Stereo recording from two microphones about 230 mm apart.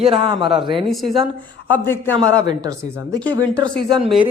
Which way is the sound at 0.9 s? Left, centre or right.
Centre.